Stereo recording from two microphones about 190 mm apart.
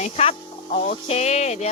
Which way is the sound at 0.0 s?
35° left (ahead or behind).